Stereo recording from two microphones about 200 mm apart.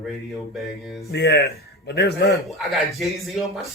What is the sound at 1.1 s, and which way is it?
Speech, 55° left (ahead or behind).